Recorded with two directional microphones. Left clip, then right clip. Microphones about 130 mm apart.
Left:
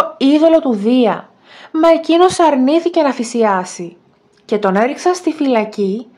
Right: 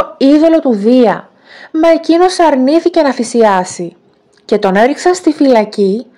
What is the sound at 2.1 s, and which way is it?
Speech, 15° right (ahead or behind).